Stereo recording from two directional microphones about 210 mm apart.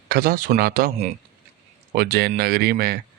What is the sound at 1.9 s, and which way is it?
Speech, 50° right (ahead or behind).